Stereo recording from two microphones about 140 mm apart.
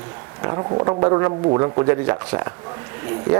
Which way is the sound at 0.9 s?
25° right (ahead or behind).